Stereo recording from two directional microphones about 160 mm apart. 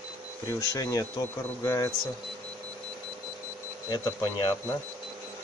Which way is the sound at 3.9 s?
15° left (ahead or behind).